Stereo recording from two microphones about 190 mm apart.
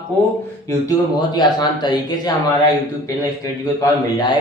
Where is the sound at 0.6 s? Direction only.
20° left (ahead or behind).